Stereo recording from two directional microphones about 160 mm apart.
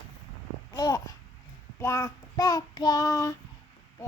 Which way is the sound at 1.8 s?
20° left (ahead or behind).